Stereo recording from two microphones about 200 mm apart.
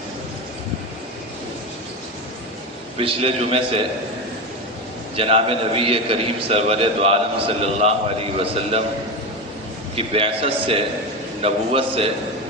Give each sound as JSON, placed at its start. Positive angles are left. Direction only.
{"t": 3.0, "sound": "a man's voice", "side_deg": -30}
{"t": 5.1, "sound": "a man's voice", "side_deg": -30}
{"t": 9.9, "sound": "a man's voice", "side_deg": -30}